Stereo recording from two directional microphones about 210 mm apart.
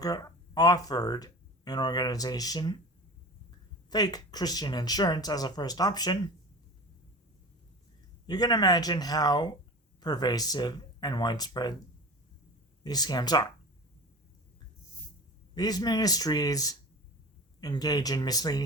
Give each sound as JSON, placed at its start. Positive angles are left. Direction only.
{"t": 0.0, "sound": "speech", "side_deg": 15}
{"t": 3.8, "sound": "speech", "side_deg": 20}
{"t": 8.3, "sound": "speech", "side_deg": 20}
{"t": 12.8, "sound": "speech", "side_deg": 20}
{"t": 15.5, "sound": "speech", "side_deg": 20}